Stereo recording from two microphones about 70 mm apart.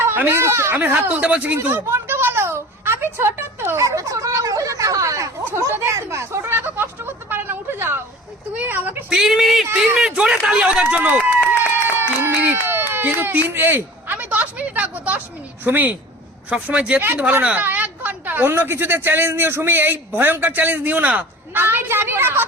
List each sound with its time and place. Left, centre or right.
0.0 s speech: right
0.9 s speech: right
1.5 s a sound: right
3.8 s speech: right
5.5 s a sound: right
8.5 s speech: right
9.0 s speech: centre; by 11.3 s right
11.6 s a sound: right
15.6 s speech: right
17.0 s a woman's voice: right